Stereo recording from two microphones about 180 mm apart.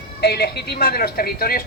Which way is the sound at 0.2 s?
65° left (ahead or behind).